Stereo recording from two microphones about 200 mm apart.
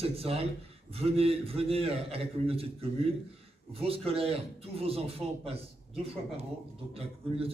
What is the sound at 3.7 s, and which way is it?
A man's voice, 30° right (ahead or behind).